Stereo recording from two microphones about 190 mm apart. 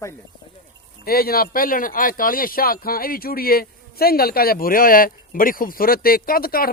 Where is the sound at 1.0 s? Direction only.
50° left (ahead or behind).